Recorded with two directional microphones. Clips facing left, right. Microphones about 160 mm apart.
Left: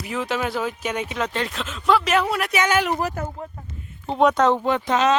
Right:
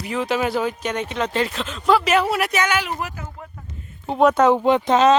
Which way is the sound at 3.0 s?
40° left (ahead or behind).